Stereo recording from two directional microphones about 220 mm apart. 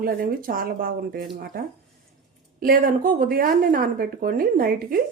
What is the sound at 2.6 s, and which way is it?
Speech, 40° right (ahead or behind).